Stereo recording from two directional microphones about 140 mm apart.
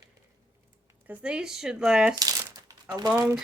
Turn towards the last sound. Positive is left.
turn(degrees=-25)  # may be behind; listen again after turning